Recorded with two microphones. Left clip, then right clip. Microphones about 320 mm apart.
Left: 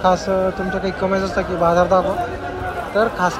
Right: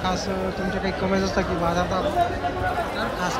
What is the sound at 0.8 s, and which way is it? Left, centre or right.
Speech, centre.